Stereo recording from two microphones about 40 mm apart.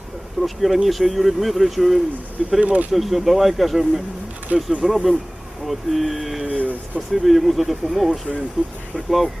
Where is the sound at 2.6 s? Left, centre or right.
Right.